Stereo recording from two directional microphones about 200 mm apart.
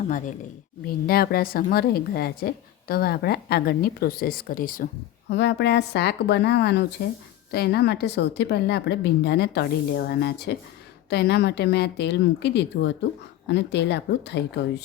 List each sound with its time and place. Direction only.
0.9 s a woman's voice: 50° left (ahead or behind)
5.3 s speech: 60° left (ahead or behind)